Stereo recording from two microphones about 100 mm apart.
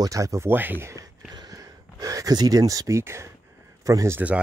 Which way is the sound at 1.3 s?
40° right (ahead or behind).